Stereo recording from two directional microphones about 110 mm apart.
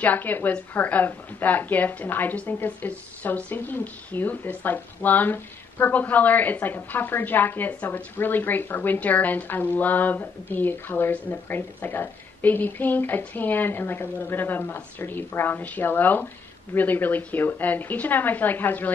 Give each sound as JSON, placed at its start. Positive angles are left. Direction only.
{"t": 0.0, "sound": "a woman's voice", "side_deg": 15}